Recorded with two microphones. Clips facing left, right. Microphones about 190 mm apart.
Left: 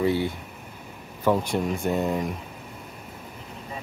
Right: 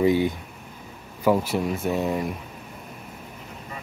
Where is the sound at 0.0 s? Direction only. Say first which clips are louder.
Right 4 dB; 15° right (ahead or behind).